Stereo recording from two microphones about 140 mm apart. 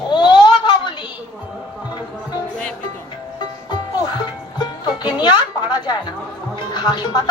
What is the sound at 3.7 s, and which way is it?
Music, 30° left (ahead or behind).